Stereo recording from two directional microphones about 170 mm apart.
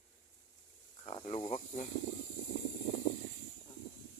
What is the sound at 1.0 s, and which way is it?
Speech, 35° left (ahead or behind).